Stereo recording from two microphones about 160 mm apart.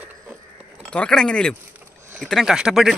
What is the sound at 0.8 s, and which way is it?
Speech, 5° left (ahead or behind).